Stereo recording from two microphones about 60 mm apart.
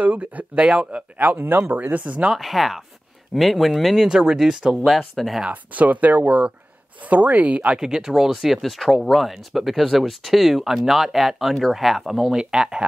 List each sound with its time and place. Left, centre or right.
0.0 s speech: right
1.2 s speech: right
2.3 s speech: centre
5.5 s speech: right
7.8 s speech: centre